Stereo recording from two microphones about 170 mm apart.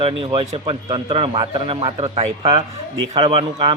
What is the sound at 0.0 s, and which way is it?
A man's voice, 30° right (ahead or behind).